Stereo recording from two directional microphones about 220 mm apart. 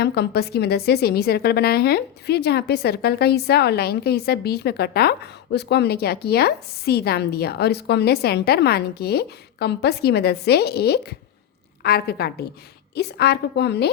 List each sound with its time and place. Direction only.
0.0 s a woman's voice: 45° left (ahead or behind)